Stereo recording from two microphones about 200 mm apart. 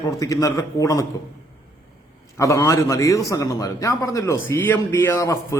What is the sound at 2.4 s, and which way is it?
A man's voice, 15° left (ahead or behind).